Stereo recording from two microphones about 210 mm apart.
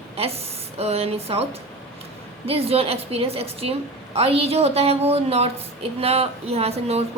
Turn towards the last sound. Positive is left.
turn(degrees=-30)  # may be behind; listen again after turning